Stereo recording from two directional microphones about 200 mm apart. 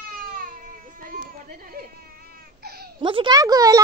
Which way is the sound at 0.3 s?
45° right (ahead or behind).